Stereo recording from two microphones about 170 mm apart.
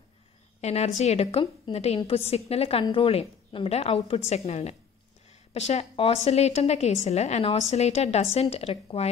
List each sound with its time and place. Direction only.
0.6 s a woman's voice: 40° left (ahead or behind)